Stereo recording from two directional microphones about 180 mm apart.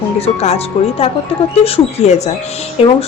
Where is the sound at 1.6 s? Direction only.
35° left (ahead or behind).